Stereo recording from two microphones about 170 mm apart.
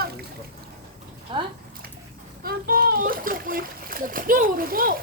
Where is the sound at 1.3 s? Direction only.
30° right (ahead or behind).